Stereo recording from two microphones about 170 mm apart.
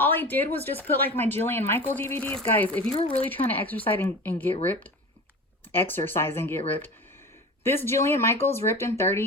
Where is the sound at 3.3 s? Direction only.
10° left (ahead or behind).